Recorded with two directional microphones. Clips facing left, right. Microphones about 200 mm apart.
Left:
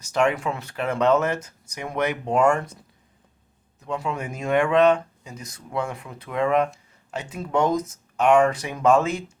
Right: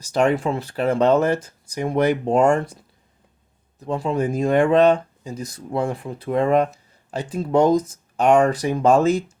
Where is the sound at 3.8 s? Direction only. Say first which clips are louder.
Right 6 dB; 35° right (ahead or behind).